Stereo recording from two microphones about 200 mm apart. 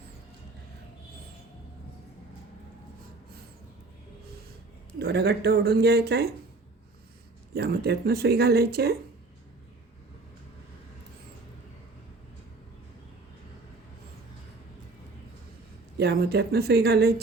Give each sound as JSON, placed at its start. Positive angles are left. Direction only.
{"t": 4.9, "sound": "speech", "side_deg": -55}
{"t": 7.5, "sound": "speech", "side_deg": -55}
{"t": 16.0, "sound": "speech", "side_deg": -55}